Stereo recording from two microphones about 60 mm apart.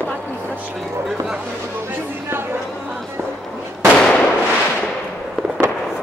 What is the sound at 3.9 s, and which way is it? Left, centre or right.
Firecracker, centre.